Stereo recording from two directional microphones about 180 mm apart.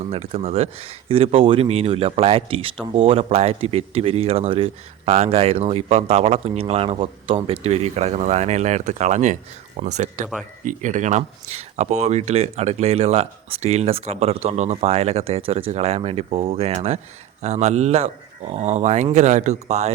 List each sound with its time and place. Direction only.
0.0 s speech: 35° right (ahead or behind)